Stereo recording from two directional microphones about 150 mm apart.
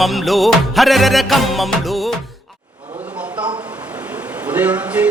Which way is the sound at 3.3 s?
35° right (ahead or behind).